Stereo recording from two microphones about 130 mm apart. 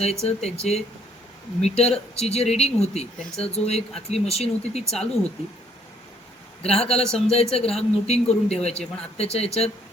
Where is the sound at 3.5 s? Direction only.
55° left (ahead or behind).